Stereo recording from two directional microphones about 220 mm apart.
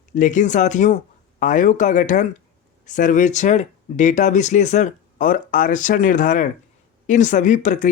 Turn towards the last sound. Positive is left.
turn(degrees=35)  # may be behind; listen again after turning